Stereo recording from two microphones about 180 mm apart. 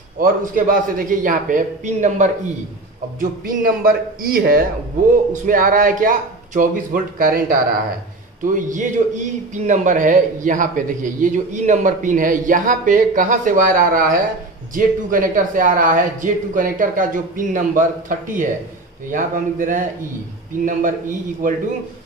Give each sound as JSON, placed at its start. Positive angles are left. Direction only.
{"t": 0.2, "sound": "a man's voice", "side_deg": -50}
{"t": 8.5, "sound": "a man's voice", "side_deg": -45}